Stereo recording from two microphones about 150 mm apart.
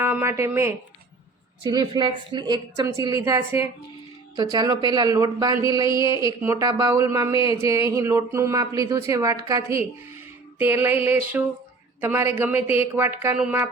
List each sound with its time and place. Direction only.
0.0 s speech: 15° right (ahead or behind)
1.7 s speech: 30° right (ahead or behind)
10.6 s a sound: 15° right (ahead or behind)